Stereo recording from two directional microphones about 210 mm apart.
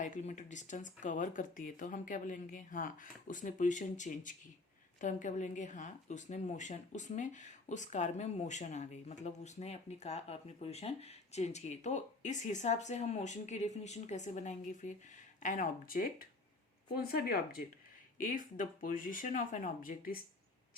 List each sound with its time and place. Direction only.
0.0 s speech: 35° left (ahead or behind)